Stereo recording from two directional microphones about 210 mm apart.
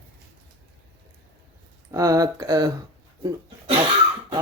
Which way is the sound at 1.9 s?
15° right (ahead or behind).